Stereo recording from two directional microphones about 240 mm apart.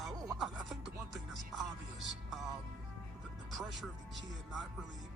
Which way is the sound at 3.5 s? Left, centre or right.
Centre.